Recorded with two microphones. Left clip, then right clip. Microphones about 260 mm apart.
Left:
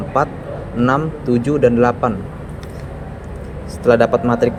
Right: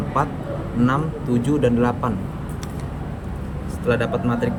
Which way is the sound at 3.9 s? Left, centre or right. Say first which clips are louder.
Left 9 dB; centre.